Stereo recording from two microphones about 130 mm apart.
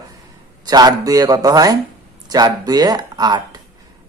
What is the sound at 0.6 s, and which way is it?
A man's voice, 30° right (ahead or behind).